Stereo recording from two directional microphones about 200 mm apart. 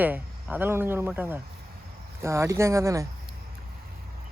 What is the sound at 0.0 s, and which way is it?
Speech, 10° right (ahead or behind).